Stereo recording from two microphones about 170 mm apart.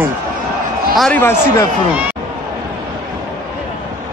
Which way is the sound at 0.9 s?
Centre (ahead or behind).